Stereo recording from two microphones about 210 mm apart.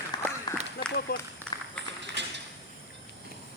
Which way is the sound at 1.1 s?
45° left (ahead or behind).